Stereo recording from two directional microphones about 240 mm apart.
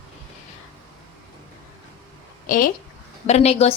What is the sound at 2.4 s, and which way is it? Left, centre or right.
A woman's voice, left.